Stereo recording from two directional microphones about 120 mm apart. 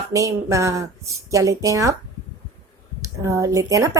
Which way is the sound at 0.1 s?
25° right (ahead or behind).